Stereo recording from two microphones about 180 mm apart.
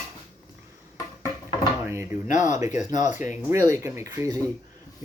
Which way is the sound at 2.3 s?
40° left (ahead or behind).